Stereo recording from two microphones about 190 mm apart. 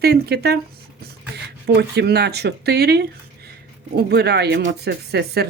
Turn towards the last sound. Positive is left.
turn(degrees=-60)  # may be behind; listen again after turning